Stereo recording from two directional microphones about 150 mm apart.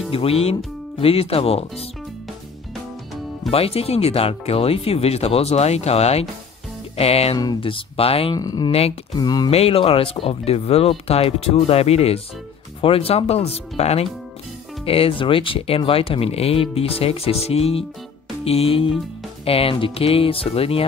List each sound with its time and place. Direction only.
0.1 s speech: 40° left (ahead or behind)
3.5 s speech: 40° left (ahead or behind)
7.3 s speech: 30° left (ahead or behind)
8.4 s speech: 25° left (ahead or behind)
9.5 s speech: 40° left (ahead or behind)